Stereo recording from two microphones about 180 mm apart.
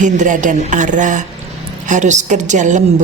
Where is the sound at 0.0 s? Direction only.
45° right (ahead or behind).